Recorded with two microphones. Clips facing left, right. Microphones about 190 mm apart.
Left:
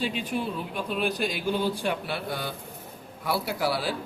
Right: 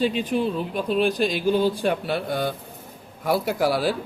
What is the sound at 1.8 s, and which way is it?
Speech, 50° right (ahead or behind).